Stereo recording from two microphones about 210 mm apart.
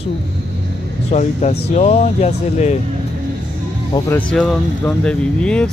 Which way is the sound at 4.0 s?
10° left (ahead or behind).